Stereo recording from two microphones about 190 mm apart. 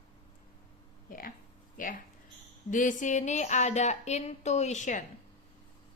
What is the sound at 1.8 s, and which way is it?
Speech, 45° left (ahead or behind).